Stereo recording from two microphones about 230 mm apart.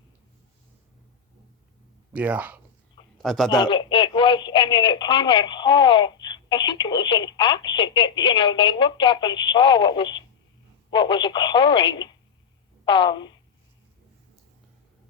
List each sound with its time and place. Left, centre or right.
2.1 s a man's voice: centre
3.5 s speech: centre